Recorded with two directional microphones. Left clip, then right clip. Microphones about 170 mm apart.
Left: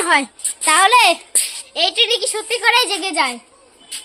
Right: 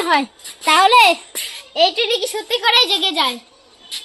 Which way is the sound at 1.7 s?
50° right (ahead or behind).